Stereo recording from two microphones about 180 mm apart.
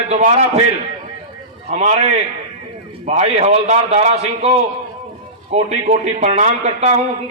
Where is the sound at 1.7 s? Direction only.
35° right (ahead or behind).